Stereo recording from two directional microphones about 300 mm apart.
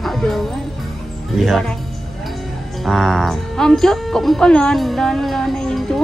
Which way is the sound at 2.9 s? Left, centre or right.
Centre.